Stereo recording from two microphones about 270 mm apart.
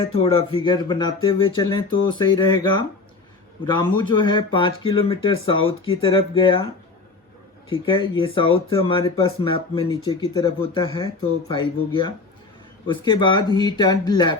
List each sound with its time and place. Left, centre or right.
0.0 s speech: left
7.7 s speech: centre
12.9 s speech: centre